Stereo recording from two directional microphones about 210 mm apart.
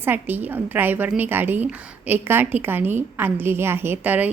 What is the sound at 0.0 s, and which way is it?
A woman's voice, 10° right (ahead or behind).